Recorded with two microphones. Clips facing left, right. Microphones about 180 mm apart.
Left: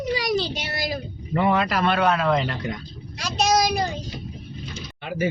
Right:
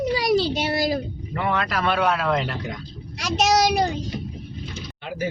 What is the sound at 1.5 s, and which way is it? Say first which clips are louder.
Speech: left 3 dB; 10° left (ahead or behind).